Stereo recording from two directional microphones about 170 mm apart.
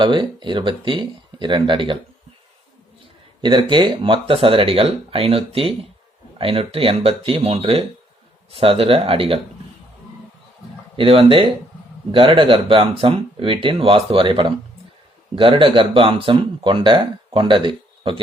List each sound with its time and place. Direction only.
0.0 s speech: 30° right (ahead or behind)
3.4 s speech: 25° right (ahead or behind)
10.9 s speech: 30° right (ahead or behind)